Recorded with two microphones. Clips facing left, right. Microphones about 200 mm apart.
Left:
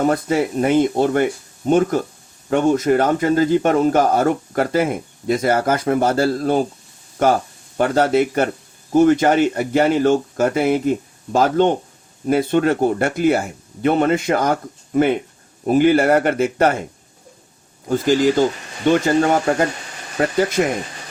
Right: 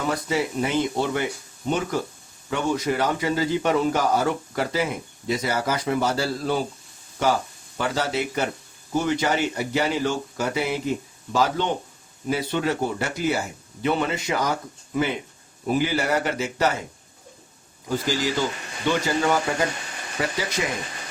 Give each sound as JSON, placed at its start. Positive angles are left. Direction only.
{"t": 0.0, "sound": "a man's voice", "side_deg": 50}
{"t": 17.8, "sound": "a man's voice", "side_deg": 50}